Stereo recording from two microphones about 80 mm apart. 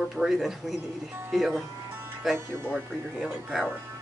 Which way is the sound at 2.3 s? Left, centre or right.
Right.